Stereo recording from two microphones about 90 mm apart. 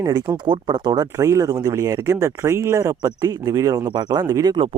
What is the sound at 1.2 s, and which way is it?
Speech, 40° right (ahead or behind).